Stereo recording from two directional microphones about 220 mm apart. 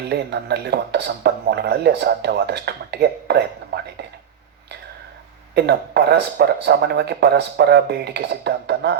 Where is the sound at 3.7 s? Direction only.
50° right (ahead or behind).